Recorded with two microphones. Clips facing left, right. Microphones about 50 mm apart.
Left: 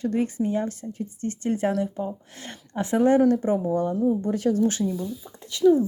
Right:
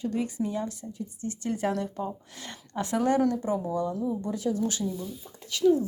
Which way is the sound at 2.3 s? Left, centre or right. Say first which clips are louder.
Left 2 dB; left.